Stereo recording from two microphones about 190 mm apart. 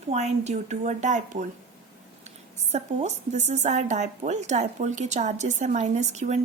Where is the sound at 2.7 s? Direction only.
35° right (ahead or behind).